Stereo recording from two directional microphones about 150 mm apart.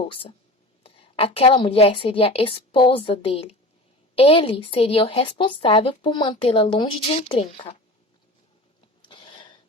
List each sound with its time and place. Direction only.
0.1 s a woman's voice: 35° left (ahead or behind)
9.0 s cough: 30° left (ahead or behind)